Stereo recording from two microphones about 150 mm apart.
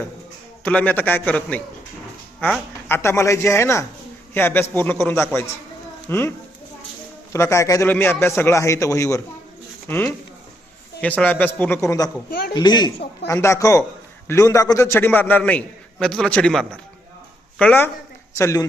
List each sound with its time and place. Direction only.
0.6 s a man's voice: 10° left (ahead or behind)
2.9 s a man's voice: 20° left (ahead or behind)
7.3 s a man's voice: 20° left (ahead or behind)
11.0 s a man's voice: 10° left (ahead or behind)